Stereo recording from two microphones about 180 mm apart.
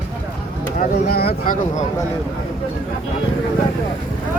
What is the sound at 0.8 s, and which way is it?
Speech, 60° left (ahead or behind).